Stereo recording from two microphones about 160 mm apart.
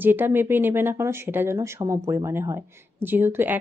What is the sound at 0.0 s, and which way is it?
A woman's voice, 10° right (ahead or behind).